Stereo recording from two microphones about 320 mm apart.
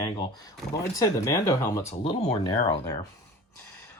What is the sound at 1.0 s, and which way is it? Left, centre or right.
Speech, centre.